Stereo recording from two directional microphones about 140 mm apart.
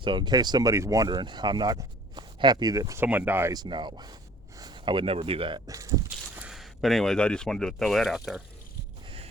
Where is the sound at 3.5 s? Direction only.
30° right (ahead or behind).